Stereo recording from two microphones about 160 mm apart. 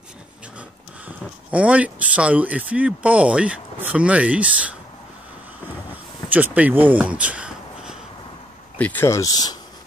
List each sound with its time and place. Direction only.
0.6 s speech: 10° right (ahead or behind)
6.2 s speech: 10° right (ahead or behind)
8.7 s speech: 10° left (ahead or behind)